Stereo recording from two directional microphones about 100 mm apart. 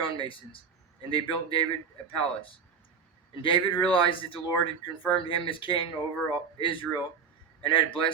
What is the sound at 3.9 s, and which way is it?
Speech, 60° left (ahead or behind).